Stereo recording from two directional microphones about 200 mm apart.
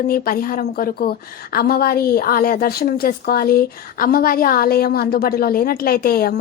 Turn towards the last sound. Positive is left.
turn(degrees=50)  # may be behind; listen again after turning